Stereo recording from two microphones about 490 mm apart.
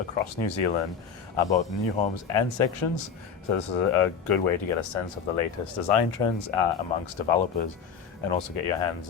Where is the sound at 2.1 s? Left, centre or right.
Left.